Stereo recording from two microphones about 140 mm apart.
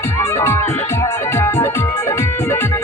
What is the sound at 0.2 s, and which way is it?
Music, 20° left (ahead or behind).